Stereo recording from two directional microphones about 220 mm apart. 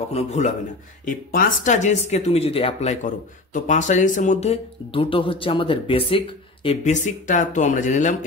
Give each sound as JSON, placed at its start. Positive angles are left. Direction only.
{"t": 0.1, "sound": "speech", "side_deg": 30}